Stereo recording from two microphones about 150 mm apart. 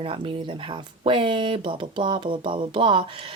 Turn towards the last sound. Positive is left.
turn(degrees=-35)  # may be behind; listen again after turning